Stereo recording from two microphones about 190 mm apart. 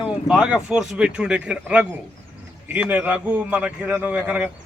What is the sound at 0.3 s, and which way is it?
A man's voice, 5° right (ahead or behind).